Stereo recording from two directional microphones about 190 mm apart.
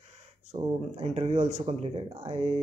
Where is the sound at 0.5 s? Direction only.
35° right (ahead or behind).